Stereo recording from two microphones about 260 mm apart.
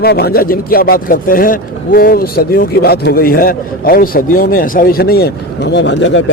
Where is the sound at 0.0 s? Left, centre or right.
Left.